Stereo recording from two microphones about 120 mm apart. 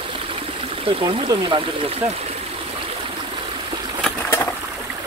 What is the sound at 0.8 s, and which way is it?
Speech, 45° right (ahead or behind).